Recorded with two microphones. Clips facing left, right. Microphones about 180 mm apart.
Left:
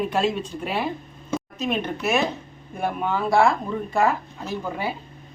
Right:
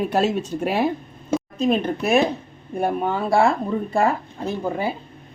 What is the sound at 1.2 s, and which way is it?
Speech, 30° right (ahead or behind).